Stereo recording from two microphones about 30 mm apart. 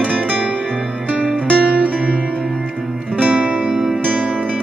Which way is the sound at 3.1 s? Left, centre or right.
Right.